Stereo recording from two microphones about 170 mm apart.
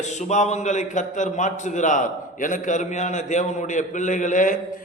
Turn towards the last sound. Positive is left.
turn(degrees=50)  # may be behind; listen again after turning